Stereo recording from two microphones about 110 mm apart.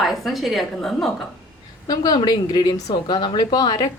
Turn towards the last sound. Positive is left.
turn(degrees=35)  # may be behind; listen again after turning